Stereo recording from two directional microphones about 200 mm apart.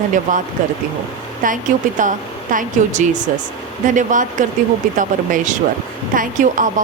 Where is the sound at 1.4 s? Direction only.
40° right (ahead or behind).